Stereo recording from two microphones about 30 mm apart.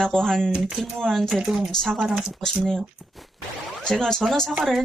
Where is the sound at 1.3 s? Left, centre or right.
Centre.